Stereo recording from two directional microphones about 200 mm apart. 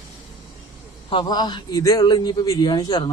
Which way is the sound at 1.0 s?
25° left (ahead or behind).